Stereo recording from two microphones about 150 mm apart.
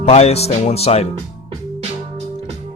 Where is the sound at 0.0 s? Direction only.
45° left (ahead or behind).